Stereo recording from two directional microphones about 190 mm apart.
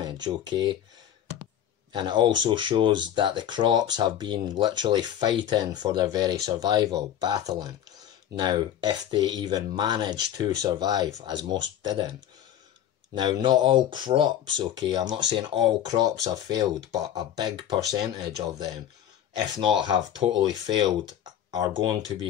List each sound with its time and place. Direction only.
0.0 s speech: 20° right (ahead or behind)
1.9 s speech: 25° right (ahead or behind)
19.8 s speech: 20° right (ahead or behind)
21.5 s speech: 20° right (ahead or behind)